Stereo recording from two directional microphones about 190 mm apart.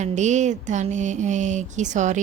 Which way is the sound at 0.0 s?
40° right (ahead or behind).